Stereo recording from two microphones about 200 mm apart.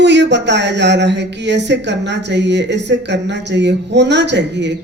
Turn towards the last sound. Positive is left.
turn(degrees=-60)  # may be behind; listen again after turning